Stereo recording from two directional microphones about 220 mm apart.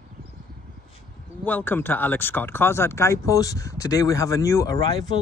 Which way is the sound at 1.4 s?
10° left (ahead or behind).